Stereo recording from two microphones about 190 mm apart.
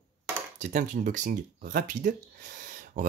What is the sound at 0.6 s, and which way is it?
Speech, 40° right (ahead or behind).